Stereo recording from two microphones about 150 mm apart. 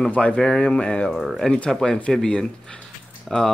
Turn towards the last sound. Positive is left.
turn(degrees=5)  # may be behind; listen again after turning